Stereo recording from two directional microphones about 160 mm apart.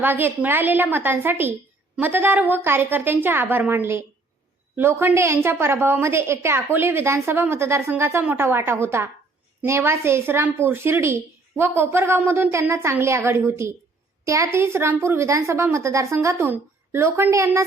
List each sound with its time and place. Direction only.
0.0 s a woman's voice: 15° right (ahead or behind)